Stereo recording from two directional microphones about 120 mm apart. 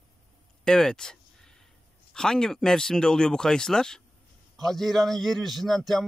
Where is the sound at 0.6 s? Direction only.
5° left (ahead or behind).